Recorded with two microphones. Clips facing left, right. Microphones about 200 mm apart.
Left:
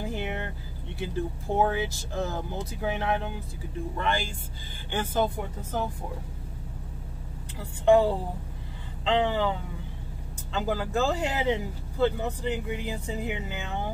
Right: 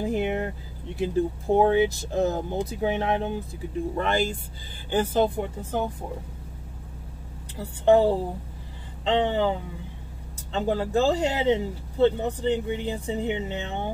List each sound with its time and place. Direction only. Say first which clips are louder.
0.1 s vehicle: right 7 dB; 35° right (ahead or behind)
1.5 s speech: right 7 dB; 30° right (ahead or behind)
4.9 s speech: right 5 dB; 25° right (ahead or behind)
7.5 s speech: right 2 dB; 35° right (ahead or behind)